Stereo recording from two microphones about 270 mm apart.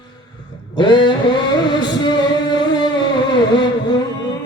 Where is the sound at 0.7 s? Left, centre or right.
Centre.